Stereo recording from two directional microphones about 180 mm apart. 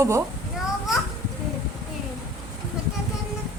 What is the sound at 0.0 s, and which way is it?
Speech, 15° right (ahead or behind).